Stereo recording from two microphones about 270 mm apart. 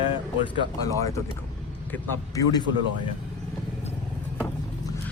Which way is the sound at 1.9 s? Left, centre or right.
Centre.